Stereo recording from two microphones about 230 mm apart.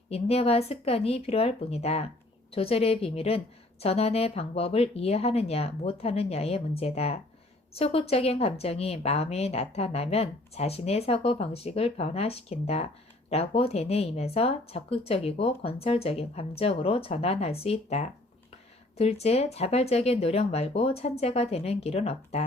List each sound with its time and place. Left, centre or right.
0.1 s speech: left